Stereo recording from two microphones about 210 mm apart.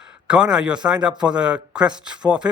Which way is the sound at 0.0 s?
5° right (ahead or behind).